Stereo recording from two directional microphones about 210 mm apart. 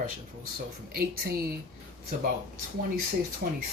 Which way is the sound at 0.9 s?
45° right (ahead or behind).